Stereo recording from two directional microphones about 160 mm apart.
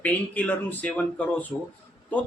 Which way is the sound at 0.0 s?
10° left (ahead or behind).